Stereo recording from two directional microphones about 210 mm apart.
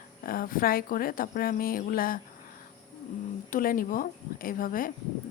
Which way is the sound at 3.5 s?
40° left (ahead or behind).